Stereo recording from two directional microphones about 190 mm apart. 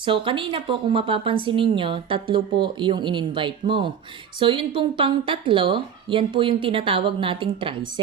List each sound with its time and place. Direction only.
0.0 s a woman's voice: 25° right (ahead or behind)